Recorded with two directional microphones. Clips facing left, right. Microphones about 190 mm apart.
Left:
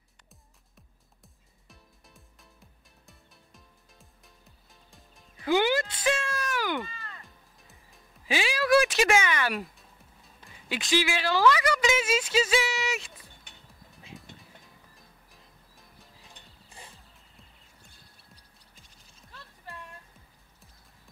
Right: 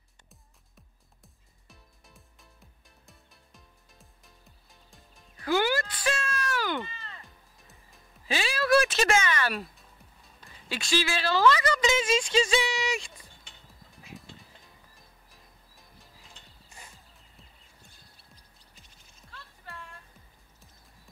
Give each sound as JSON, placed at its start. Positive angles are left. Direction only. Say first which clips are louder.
{"t": 1.2, "sound": "music", "louder": "even", "side_deg": 0}
{"t": 5.4, "sound": "music", "louder": "left 2 dB", "side_deg": 20}
{"t": 6.8, "sound": "music", "louder": "left 1 dB", "side_deg": -15}
{"t": 7.2, "sound": "music", "louder": "even", "side_deg": 0}
{"t": 8.3, "sound": "a sound", "louder": "left 1 dB", "side_deg": 15}
{"t": 9.8, "sound": "music", "louder": "even", "side_deg": 0}
{"t": 10.5, "sound": "a sound", "louder": "left 2 dB", "side_deg": 15}
{"t": 14.1, "sound": "music", "louder": "right 1 dB", "side_deg": 0}
{"t": 16.6, "sound": "music", "louder": "left 2 dB", "side_deg": 30}